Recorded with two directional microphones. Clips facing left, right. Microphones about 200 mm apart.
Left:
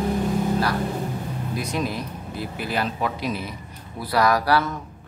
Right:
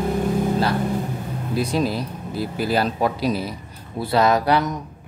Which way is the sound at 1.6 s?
30° right (ahead or behind).